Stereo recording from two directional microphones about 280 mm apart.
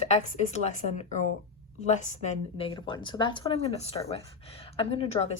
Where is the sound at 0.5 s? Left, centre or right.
Left.